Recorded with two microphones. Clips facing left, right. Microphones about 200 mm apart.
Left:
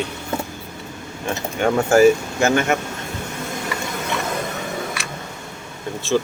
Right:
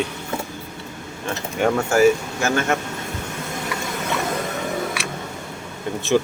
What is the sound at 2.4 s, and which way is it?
Speech, 25° left (ahead or behind).